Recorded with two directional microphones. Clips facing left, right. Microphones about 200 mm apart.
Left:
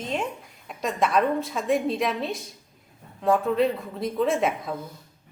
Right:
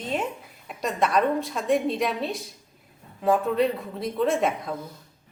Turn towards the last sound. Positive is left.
turn(degrees=0)  # may be behind; listen again after turning